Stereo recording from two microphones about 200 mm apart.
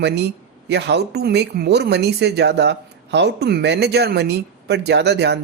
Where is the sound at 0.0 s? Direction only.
55° right (ahead or behind).